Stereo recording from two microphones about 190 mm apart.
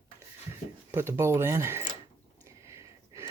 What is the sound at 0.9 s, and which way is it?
Speech, 15° right (ahead or behind).